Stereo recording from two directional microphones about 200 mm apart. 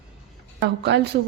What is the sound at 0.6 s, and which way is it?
Speech, 60° right (ahead or behind).